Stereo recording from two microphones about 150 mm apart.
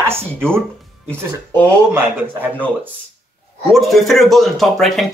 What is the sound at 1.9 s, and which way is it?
Speech, 15° right (ahead or behind).